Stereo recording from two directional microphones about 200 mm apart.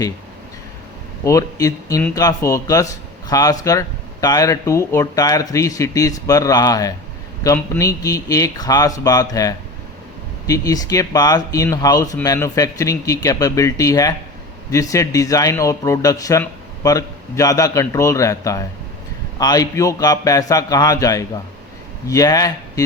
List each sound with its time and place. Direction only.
1.2 s speech: 15° left (ahead or behind)